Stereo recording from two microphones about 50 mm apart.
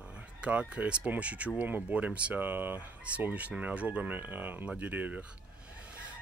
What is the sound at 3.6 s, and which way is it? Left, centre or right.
Speech, right.